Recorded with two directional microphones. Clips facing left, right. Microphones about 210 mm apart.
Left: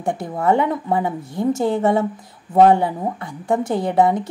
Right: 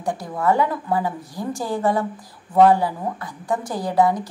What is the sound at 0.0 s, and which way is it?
A woman's voice, 25° left (ahead or behind).